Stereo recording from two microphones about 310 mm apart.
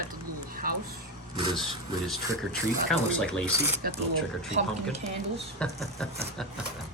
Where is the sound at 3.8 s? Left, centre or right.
Right.